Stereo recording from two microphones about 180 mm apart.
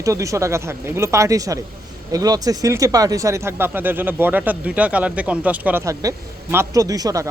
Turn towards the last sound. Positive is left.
turn(degrees=-20)  # may be behind; listen again after turning